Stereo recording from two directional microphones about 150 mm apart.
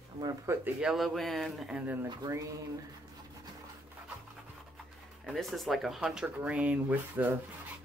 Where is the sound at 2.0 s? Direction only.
25° right (ahead or behind).